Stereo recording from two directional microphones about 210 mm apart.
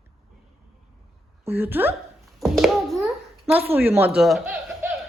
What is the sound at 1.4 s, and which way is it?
Speech, 10° right (ahead or behind).